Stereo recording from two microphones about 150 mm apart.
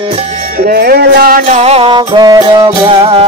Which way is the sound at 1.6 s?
40° right (ahead or behind).